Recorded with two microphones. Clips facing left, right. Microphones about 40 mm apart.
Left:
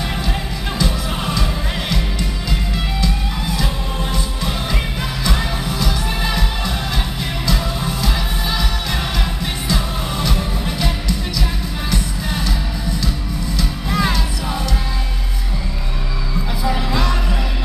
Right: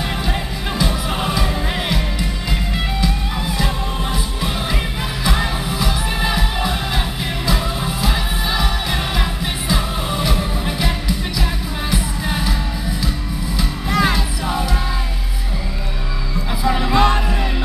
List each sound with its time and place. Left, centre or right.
0.7 s music: centre
13.8 s music: centre
16.6 s music: centre